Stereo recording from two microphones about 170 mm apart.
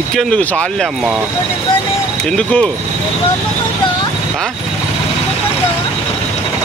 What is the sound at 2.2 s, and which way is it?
Speech, 5° left (ahead or behind).